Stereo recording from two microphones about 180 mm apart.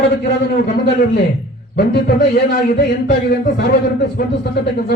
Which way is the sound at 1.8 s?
65° left (ahead or behind).